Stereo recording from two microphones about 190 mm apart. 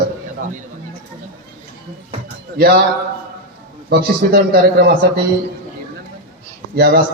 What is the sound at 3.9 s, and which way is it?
A man's voice, 55° right (ahead or behind).